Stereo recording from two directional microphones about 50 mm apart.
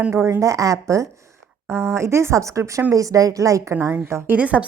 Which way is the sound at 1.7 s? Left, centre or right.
Right.